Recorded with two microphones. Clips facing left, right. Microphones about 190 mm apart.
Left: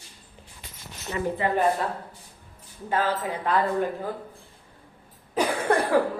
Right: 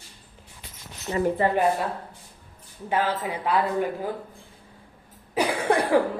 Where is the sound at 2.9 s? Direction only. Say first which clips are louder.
Even; 10° right (ahead or behind).